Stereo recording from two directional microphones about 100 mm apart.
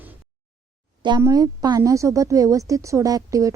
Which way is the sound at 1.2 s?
40° right (ahead or behind).